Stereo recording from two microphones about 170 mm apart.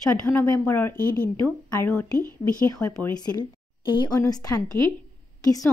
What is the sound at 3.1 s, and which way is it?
A woman's voice, 25° left (ahead or behind).